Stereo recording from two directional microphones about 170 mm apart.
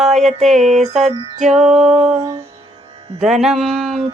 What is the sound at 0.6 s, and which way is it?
Female singing, 40° right (ahead or behind).